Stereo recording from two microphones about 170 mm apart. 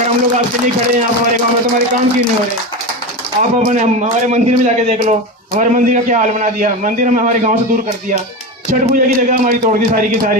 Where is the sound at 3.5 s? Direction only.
45° right (ahead or behind).